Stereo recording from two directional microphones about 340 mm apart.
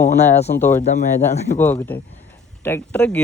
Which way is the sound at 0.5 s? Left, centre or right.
Left.